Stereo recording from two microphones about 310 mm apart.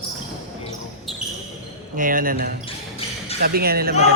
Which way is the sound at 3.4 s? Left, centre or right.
Right.